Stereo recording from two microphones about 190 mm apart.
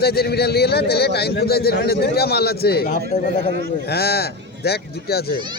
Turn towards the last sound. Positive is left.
turn(degrees=55)  # may be behind; listen again after turning